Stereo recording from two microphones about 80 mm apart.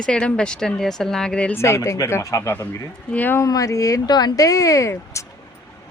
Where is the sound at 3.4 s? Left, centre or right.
Left.